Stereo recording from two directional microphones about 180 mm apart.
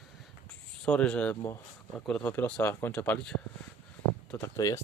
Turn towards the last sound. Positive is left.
turn(degrees=20)  # may be behind; listen again after turning